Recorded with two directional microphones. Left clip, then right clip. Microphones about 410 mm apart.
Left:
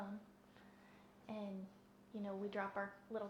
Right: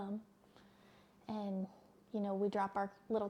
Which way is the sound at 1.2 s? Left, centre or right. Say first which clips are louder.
Right 5 dB; right.